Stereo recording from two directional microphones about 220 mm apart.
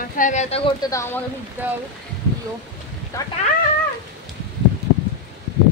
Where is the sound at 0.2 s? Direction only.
35° left (ahead or behind).